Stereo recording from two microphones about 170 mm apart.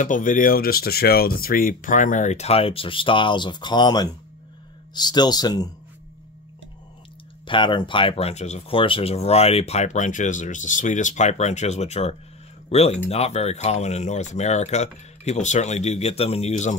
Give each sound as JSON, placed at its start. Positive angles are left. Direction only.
{"t": 0.0, "sound": "speech", "side_deg": 50}
{"t": 7.4, "sound": "speech", "side_deg": 30}